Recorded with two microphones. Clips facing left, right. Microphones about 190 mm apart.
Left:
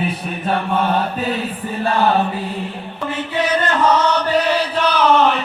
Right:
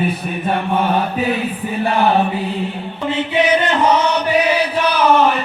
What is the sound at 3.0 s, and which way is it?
Chant, 20° right (ahead or behind).